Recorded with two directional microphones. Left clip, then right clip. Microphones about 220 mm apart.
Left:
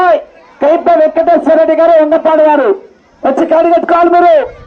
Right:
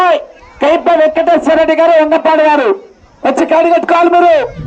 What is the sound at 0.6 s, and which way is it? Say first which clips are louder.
A man's voice: left 1 dB; 20° right (ahead or behind).